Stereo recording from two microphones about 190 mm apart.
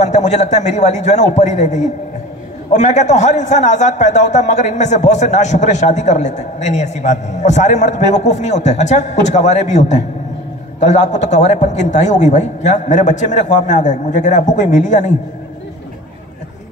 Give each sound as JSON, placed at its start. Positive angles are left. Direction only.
{"t": 0.0, "sound": "a man's voice", "side_deg": 40}